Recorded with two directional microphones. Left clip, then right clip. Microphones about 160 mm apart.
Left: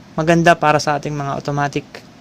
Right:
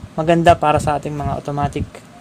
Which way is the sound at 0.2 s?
15° left (ahead or behind).